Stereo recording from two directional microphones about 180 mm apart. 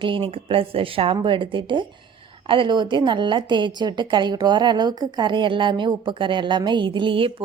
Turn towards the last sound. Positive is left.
turn(degrees=-30)  # may be behind; listen again after turning